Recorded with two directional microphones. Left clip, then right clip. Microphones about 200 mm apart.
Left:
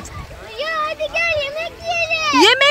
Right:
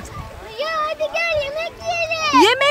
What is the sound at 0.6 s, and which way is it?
Child singing, 15° left (ahead or behind).